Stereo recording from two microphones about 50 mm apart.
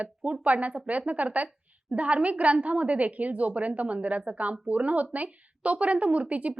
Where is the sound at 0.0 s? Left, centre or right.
Right.